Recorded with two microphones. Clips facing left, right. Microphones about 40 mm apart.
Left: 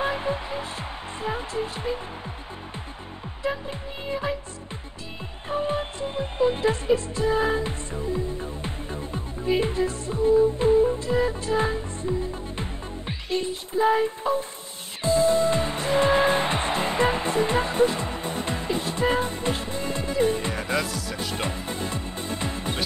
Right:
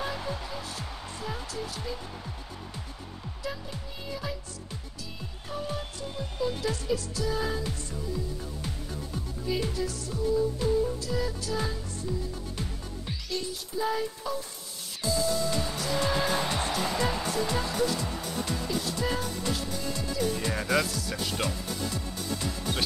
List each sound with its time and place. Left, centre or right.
0.0 s music: left
3.4 s speech: left
5.5 s speech: left
15.0 s music: left
20.8 s speech: centre
21.4 s music: left